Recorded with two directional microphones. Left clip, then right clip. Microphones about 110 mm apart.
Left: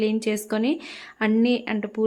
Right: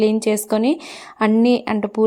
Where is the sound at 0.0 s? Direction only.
35° right (ahead or behind).